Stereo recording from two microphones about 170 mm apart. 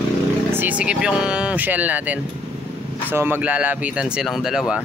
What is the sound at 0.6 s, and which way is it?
Speech, 10° right (ahead or behind).